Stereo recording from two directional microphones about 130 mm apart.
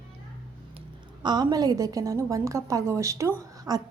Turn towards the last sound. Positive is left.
turn(degrees=-30)  # may be behind; listen again after turning